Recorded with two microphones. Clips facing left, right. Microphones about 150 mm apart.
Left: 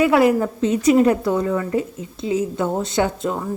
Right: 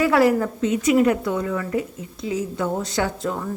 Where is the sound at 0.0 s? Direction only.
20° left (ahead or behind).